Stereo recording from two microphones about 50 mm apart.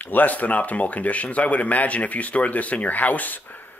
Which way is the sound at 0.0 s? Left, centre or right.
Left.